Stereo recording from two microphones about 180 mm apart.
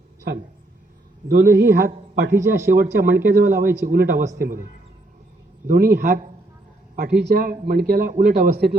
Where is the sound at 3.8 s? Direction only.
55° right (ahead or behind).